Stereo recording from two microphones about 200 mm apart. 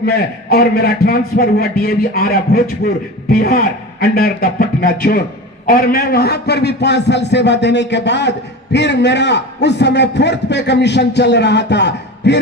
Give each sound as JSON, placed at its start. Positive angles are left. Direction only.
{"t": 0.0, "sound": "a man's voice", "side_deg": 50}